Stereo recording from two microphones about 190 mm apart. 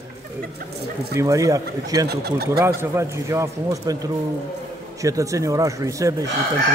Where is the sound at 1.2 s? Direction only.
15° right (ahead or behind).